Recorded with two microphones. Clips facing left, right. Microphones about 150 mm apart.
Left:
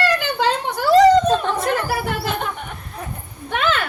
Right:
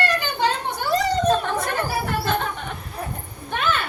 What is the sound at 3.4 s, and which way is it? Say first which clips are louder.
Speech: left 3 dB; 90° left.